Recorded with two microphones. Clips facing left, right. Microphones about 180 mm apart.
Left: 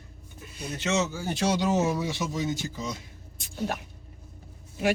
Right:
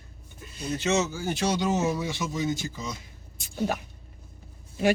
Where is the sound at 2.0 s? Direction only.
35° left (ahead or behind).